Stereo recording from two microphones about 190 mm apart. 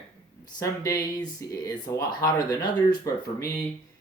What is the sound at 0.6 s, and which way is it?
Speech, 15° left (ahead or behind).